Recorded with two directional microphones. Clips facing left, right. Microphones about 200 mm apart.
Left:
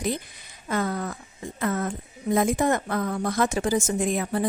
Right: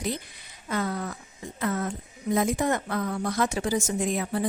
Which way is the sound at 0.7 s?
50° left (ahead or behind).